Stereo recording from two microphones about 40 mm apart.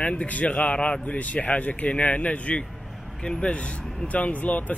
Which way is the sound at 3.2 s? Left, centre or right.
Centre.